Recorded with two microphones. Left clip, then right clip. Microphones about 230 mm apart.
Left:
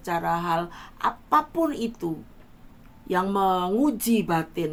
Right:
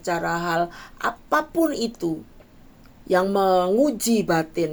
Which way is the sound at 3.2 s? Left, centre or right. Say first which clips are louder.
Right 4 dB; centre.